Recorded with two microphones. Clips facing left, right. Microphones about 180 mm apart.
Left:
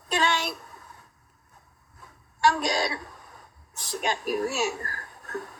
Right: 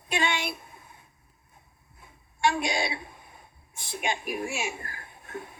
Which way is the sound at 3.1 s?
45° left (ahead or behind).